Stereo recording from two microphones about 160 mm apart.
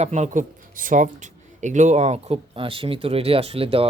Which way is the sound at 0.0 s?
45° right (ahead or behind).